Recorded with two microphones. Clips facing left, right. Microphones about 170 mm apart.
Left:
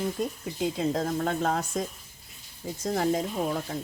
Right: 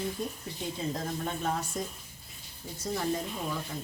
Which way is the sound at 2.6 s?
90° left.